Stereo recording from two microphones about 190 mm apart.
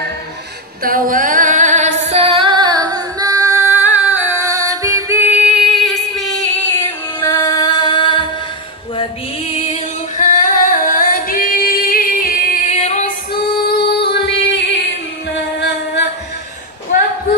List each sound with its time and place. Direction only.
0.8 s female singing: 45° right (ahead or behind); by 8.3 s 25° left (ahead or behind)
8.9 s singing: 30° left (ahead or behind); by 12.6 s 45° left (ahead or behind)
12.7 s female singing: 35° left (ahead or behind)
13.3 s music: 55° left (ahead or behind)